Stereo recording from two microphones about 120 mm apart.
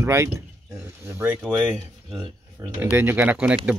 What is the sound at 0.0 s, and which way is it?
Speech, 25° right (ahead or behind).